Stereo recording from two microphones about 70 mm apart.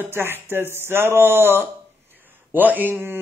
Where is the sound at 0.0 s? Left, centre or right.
Right.